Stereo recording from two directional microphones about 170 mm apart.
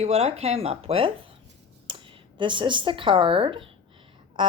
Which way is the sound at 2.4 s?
30° right (ahead or behind).